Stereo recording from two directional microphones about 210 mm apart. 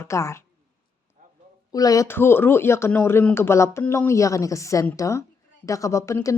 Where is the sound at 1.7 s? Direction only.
15° left (ahead or behind).